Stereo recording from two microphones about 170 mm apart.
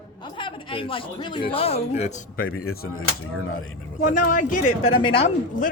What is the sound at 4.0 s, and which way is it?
Speech, 50° left (ahead or behind).